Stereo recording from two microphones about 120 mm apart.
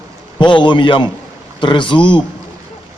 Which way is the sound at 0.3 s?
40° left (ahead or behind).